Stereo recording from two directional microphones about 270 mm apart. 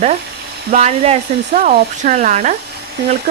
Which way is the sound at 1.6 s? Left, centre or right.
Right.